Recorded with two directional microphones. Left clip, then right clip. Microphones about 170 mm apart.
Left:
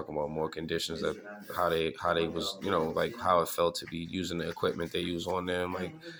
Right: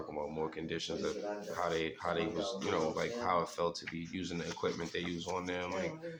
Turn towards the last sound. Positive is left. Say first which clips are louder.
# left 1 dB
turn(degrees=40)  # may be behind; listen again after turning